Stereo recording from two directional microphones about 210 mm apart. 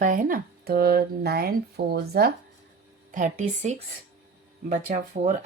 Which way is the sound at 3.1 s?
35° right (ahead or behind).